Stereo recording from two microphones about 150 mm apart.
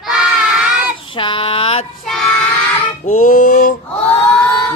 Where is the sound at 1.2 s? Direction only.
35° left (ahead or behind).